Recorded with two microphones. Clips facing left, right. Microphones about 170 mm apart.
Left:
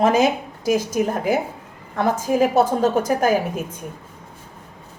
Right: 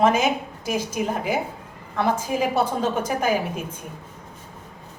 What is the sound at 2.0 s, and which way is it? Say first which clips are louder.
A woman's voice: left 4 dB; 45° left (ahead or behind).